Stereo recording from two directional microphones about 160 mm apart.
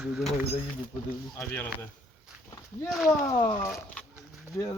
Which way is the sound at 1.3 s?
10° left (ahead or behind).